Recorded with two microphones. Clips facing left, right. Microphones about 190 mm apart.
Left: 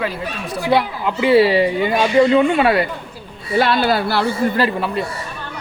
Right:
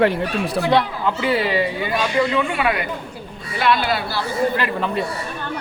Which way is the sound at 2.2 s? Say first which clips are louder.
Left 8 dB; 35° left (ahead or behind).